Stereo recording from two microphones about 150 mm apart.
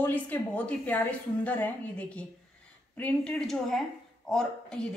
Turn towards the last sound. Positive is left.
turn(degrees=5)  # may be behind; listen again after turning